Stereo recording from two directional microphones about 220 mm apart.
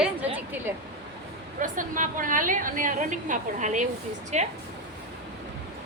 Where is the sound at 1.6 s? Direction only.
35° right (ahead or behind).